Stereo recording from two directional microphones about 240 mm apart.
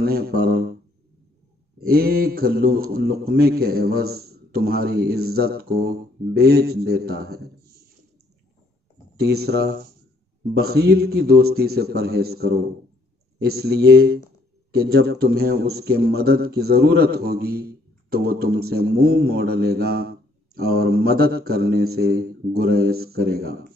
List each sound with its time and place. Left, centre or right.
0.0 s a man's voice: right
1.8 s a man's voice: right
9.2 s a man's voice: right